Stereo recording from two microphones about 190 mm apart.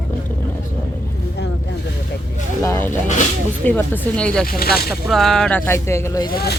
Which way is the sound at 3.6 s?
10° left (ahead or behind).